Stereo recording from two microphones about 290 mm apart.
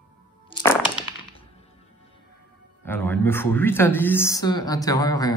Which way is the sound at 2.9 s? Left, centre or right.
Centre.